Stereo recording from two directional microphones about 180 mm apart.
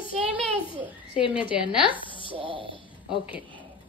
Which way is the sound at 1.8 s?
30° left (ahead or behind).